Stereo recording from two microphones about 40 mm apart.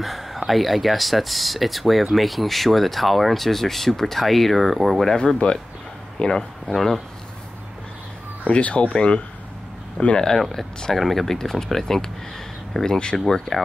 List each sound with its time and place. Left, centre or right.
0.0 s a sound: centre
0.5 s speech: centre
5.4 s speech: left
6.1 s speech: centre
6.7 s speech: centre
8.5 s speech: left
10.4 s speech: centre